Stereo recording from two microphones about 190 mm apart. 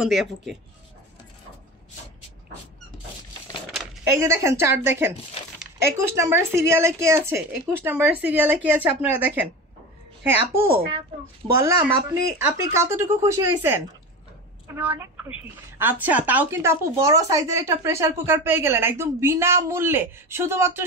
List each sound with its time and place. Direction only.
0.0 s speech: centre (ahead or behind)
4.0 s speech: 15° right (ahead or behind)
10.7 s speech: 30° right (ahead or behind)
11.6 s speech: 15° right (ahead or behind)